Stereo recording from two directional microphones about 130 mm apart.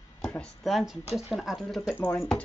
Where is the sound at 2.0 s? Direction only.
15° left (ahead or behind).